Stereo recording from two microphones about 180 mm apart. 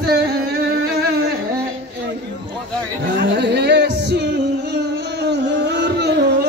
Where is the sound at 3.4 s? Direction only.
70° right (ahead or behind).